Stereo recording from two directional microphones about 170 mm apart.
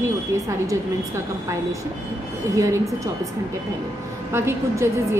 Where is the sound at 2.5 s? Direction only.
20° right (ahead or behind).